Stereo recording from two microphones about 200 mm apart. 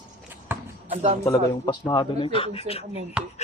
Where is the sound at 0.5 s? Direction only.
10° right (ahead or behind).